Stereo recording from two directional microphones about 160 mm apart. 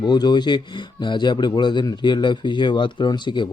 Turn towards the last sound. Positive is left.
turn(degrees=30)  # may be behind; listen again after turning